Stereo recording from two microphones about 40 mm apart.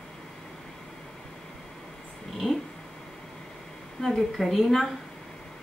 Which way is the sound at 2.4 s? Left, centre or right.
Left.